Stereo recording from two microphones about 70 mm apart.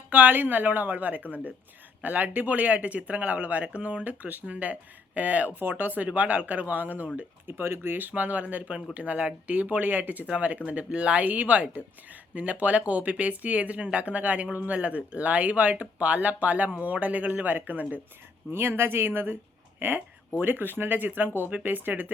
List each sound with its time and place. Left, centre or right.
0.1 s speech: right